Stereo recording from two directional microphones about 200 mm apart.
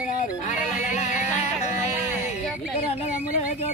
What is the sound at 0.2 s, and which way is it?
Music, 35° left (ahead or behind).